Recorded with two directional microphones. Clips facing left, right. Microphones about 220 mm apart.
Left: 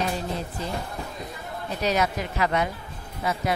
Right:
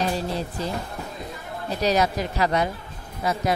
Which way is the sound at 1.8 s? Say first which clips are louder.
Right 3 dB; 35° right (ahead or behind).